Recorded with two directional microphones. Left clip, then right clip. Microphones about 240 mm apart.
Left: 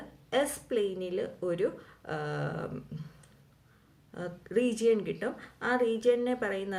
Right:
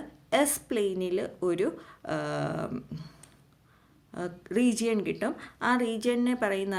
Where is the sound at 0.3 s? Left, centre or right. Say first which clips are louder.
Right 3 dB; right.